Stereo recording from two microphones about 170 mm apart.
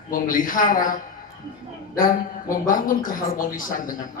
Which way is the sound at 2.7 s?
55° left (ahead or behind).